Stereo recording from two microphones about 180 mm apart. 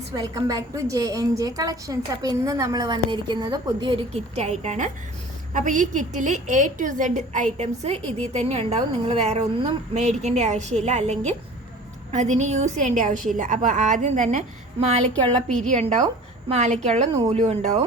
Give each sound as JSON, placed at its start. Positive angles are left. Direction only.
{"t": 0.1, "sound": "a woman's voice", "side_deg": -20}